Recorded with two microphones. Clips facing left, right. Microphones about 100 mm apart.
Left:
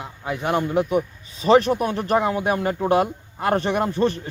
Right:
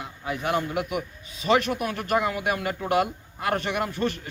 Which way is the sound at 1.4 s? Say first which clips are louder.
Left 6 dB; 35° left (ahead or behind).